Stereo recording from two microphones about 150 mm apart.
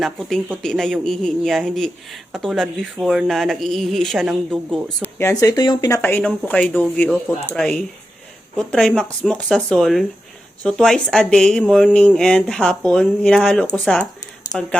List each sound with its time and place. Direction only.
0.0 s speech: centre (ahead or behind); by 6.0 s 25° left (ahead or behind)
6.0 s speech: 15° left (ahead or behind)